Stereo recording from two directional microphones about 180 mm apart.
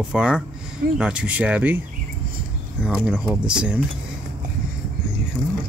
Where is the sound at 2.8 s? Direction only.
5° right (ahead or behind).